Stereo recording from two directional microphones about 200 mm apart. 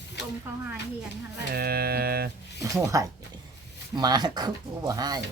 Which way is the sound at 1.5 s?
50° right (ahead or behind).